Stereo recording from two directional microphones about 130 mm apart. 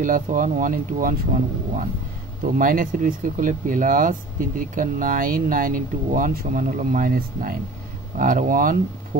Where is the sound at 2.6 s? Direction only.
90° right.